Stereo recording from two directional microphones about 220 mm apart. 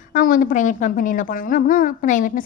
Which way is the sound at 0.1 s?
40° left (ahead or behind).